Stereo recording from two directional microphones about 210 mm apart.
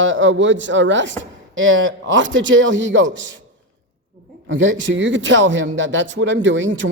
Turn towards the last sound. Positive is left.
turn(degrees=-60)  # may be behind; listen again after turning